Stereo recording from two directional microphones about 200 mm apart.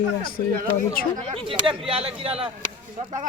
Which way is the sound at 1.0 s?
45° left (ahead or behind).